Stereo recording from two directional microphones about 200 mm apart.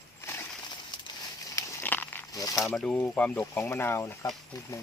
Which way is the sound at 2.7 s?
5° left (ahead or behind).